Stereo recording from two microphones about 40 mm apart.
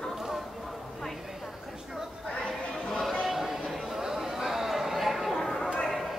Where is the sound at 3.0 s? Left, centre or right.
Centre.